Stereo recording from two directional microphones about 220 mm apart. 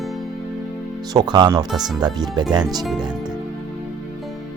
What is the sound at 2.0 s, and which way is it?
Speech, 20° right (ahead or behind).